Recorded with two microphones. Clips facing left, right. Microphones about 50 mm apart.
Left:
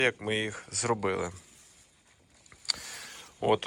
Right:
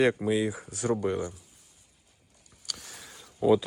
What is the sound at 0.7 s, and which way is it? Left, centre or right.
Speech, left.